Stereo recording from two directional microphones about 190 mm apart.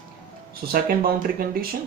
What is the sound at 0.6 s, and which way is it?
Speech, 50° right (ahead or behind).